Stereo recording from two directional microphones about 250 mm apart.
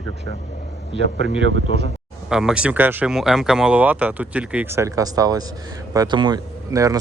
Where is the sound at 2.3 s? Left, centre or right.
Centre.